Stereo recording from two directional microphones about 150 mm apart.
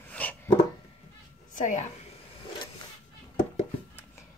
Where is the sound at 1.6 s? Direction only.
55° left (ahead or behind).